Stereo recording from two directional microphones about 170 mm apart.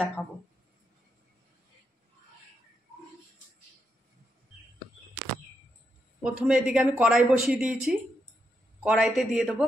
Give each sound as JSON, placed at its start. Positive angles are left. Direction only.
{"t": 0.2, "sound": "speech", "side_deg": 10}
{"t": 6.2, "sound": "speech", "side_deg": -5}